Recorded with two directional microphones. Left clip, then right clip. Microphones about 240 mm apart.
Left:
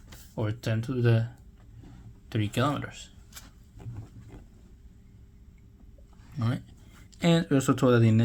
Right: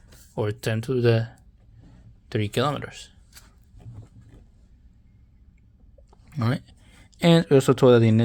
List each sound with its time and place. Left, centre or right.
0.3 s speech: right
3.3 s a sound: centre
6.3 s speech: right